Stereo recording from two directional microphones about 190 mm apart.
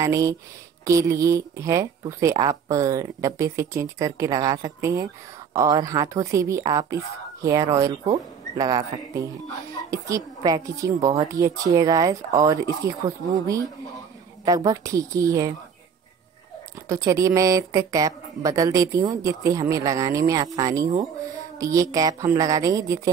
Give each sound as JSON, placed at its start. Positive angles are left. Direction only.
{"t": 0.0, "sound": "speech", "side_deg": -15}
{"t": 16.9, "sound": "speech", "side_deg": -15}